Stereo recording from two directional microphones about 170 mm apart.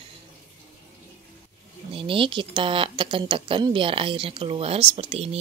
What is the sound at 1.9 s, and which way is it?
Speech, 30° right (ahead or behind).